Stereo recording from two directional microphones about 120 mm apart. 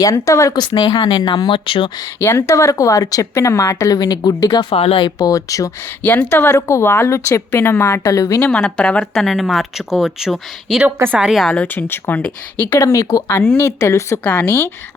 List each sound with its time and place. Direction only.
0.0 s speech: 30° left (ahead or behind); by 1.9 s 45° left (ahead or behind)
2.2 s speech: 25° left (ahead or behind)
4.7 s speech: 55° left (ahead or behind)
5.2 s speech: 30° left (ahead or behind)
6.0 s speech: 15° left (ahead or behind)
8.4 s speech: 5° left (ahead or behind)
10.8 s a woman's voice: 15° right (ahead or behind)
11.3 s speech: centre (ahead or behind)
12.8 s speech: 25° left (ahead or behind)